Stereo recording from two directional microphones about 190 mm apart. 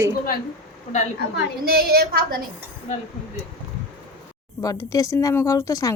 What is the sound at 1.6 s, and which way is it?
Speech, 55° right (ahead or behind).